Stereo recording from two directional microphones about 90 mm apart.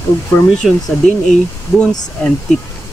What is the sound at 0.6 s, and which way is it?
Speech, 5° left (ahead or behind).